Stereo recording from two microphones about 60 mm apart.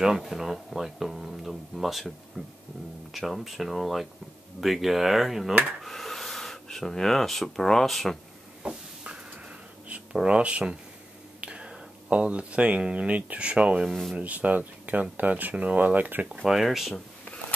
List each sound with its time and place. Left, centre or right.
0.0 s speech: centre
8.6 s vehicle: centre
10.2 s speech: centre
13.8 s speech: centre
14.1 s speech: right
16.4 s speech: centre
16.9 s a sound: centre